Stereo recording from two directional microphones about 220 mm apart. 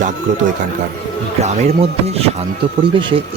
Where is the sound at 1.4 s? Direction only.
30° right (ahead or behind).